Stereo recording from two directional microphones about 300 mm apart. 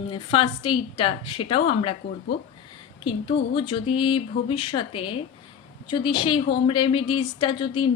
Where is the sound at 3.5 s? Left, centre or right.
Centre.